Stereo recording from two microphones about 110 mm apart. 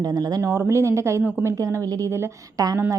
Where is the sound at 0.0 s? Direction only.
35° right (ahead or behind).